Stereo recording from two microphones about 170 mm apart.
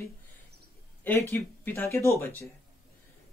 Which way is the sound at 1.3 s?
15° left (ahead or behind).